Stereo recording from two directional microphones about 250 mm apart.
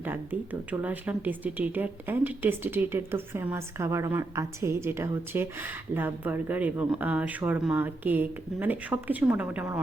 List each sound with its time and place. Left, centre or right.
0.0 s speech: centre